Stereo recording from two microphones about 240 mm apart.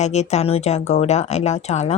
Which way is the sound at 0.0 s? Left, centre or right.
Left.